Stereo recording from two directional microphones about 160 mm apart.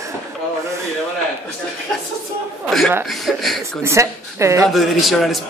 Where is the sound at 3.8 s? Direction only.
15° right (ahead or behind).